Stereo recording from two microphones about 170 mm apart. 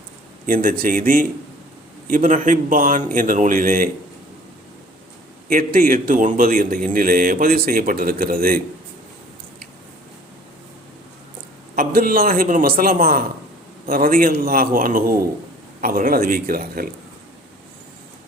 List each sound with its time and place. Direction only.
0.4 s a man's voice: 55° right (ahead or behind)
5.5 s a man's voice: 55° right (ahead or behind)
11.7 s a man's voice: 60° right (ahead or behind)